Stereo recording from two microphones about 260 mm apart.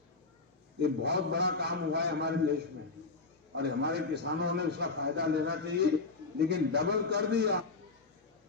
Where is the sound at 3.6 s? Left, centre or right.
Right.